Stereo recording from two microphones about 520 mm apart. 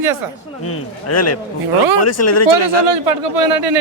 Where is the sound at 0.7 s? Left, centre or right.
Left.